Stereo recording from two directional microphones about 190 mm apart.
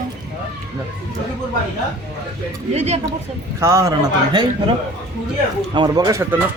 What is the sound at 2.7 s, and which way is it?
Speech, 35° right (ahead or behind).